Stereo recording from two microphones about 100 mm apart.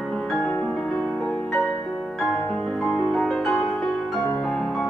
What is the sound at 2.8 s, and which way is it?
Music, 5° left (ahead or behind).